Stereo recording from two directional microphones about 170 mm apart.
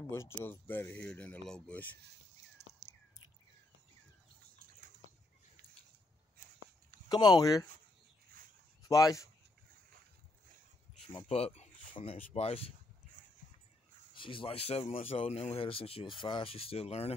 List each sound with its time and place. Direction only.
0.1 s speech: 15° left (ahead or behind)
7.1 s speech: 25° left (ahead or behind)
8.8 s speech: 20° left (ahead or behind)
11.1 s speech: 35° left (ahead or behind)
14.1 s speech: 30° left (ahead or behind)